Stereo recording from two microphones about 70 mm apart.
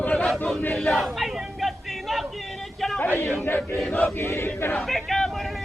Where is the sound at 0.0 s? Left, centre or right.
Left.